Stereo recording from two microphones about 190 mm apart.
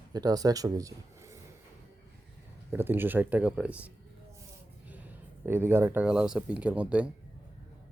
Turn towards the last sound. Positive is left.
turn(degrees=-5)  # may be behind; listen again after turning